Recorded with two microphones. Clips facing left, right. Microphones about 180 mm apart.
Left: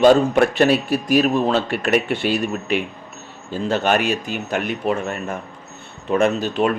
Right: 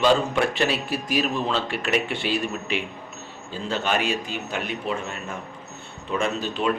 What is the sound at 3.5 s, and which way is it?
Speech, 65° left (ahead or behind).